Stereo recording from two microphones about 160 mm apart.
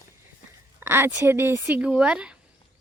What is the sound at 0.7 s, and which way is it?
Speech, 15° right (ahead or behind).